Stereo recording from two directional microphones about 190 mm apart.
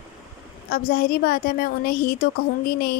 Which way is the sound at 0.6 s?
50° left (ahead or behind).